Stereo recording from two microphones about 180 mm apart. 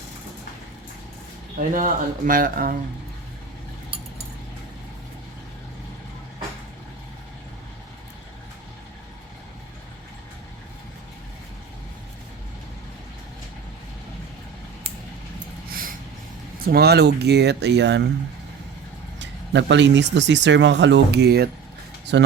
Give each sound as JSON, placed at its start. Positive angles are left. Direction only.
{"t": 1.5, "sound": "speech", "side_deg": -45}
{"t": 15.7, "sound": "snort", "side_deg": -50}
{"t": 16.6, "sound": "speech", "side_deg": -60}
{"t": 19.2, "sound": "speech", "side_deg": -80}
{"t": 22.1, "sound": "speech", "side_deg": -80}